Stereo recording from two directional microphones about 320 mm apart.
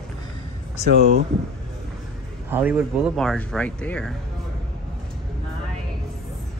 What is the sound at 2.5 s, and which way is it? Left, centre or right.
A man's voice, centre.